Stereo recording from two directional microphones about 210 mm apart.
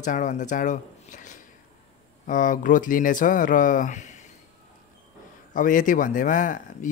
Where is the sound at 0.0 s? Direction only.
35° left (ahead or behind).